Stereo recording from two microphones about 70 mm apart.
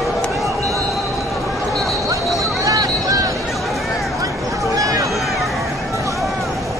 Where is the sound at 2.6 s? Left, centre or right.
Right.